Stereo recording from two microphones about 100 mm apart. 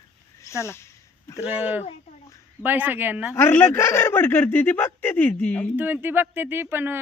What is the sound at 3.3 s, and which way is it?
Speech, 20° left (ahead or behind).